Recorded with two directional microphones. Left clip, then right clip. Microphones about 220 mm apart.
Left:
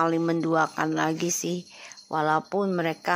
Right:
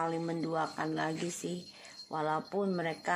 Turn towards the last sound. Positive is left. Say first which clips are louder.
# left 7 dB
turn(degrees=20)  # may be behind; listen again after turning